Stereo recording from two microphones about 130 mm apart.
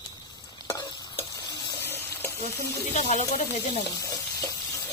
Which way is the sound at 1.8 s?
20° left (ahead or behind).